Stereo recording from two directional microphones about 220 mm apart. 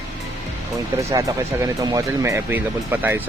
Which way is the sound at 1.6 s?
15° right (ahead or behind).